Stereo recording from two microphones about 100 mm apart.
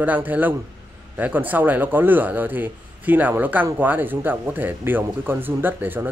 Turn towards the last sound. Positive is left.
turn(degrees=-20)  # may be behind; listen again after turning